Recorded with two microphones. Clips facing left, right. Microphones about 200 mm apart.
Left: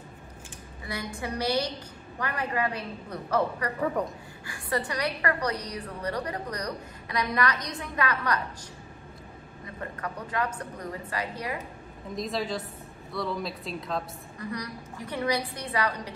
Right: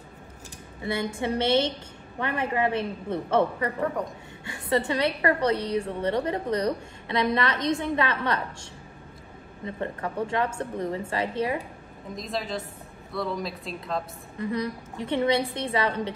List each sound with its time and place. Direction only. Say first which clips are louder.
0.8 s a woman's voice: right 7 dB; 25° right (ahead or behind)
3.8 s a woman's voice: left 2 dB; centre (ahead or behind)
4.5 s a woman's voice: right 5 dB; 25° right (ahead or behind)
9.7 s a woman's voice: right 5 dB; 25° right (ahead or behind)
12.2 s a woman's voice: left 1 dB; centre (ahead or behind)
14.4 s a woman's voice: right 7 dB; 25° right (ahead or behind)